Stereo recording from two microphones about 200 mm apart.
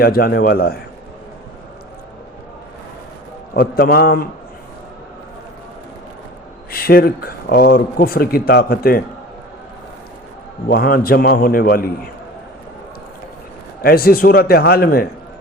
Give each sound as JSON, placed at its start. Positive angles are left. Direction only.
{"t": 0.0, "sound": "speech", "side_deg": 50}
{"t": 3.5, "sound": "speech", "side_deg": 50}
{"t": 6.7, "sound": "speech", "side_deg": 50}
{"t": 10.7, "sound": "speech", "side_deg": 50}
{"t": 13.8, "sound": "speech", "side_deg": 50}